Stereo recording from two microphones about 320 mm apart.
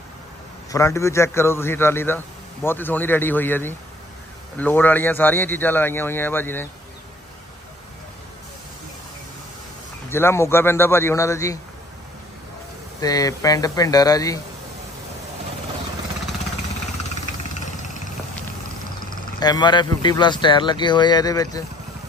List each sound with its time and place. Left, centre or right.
0.7 s a man's voice: centre
10.0 s a man's voice: centre
13.0 s a man's voice: centre
17.1 s vehicle: left
19.4 s a man's voice: centre